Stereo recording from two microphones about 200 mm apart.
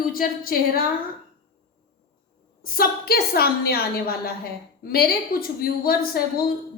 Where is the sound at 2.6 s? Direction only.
45° left (ahead or behind).